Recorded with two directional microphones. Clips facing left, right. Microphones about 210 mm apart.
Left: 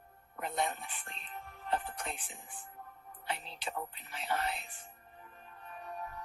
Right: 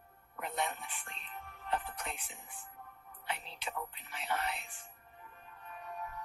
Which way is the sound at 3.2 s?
35° left (ahead or behind).